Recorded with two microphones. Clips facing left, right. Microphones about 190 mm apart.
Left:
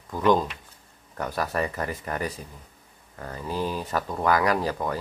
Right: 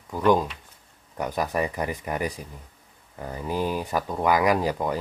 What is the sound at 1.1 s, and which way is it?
Speech, 15° right (ahead or behind).